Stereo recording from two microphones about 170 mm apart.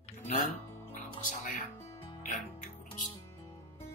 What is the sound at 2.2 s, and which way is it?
Music, 45° left (ahead or behind).